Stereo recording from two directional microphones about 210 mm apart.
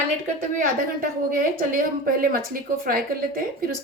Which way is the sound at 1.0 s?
45° right (ahead or behind).